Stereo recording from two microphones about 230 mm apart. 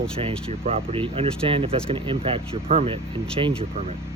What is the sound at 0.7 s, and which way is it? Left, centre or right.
Speech, right.